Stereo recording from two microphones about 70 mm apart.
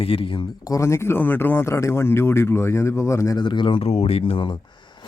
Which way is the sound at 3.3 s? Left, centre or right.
Left.